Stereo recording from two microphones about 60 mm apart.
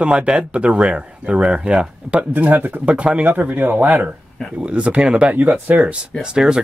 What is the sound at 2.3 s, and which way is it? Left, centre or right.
Speech, right.